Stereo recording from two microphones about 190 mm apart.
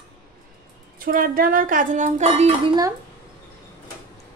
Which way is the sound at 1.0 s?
50° right (ahead or behind).